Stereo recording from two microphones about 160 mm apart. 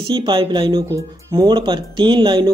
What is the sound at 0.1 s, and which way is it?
Speech, 30° right (ahead or behind).